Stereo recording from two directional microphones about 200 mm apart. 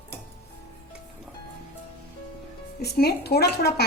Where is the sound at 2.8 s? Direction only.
50° left (ahead or behind).